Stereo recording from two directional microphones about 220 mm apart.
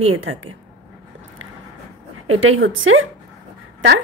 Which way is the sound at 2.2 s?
70° right (ahead or behind).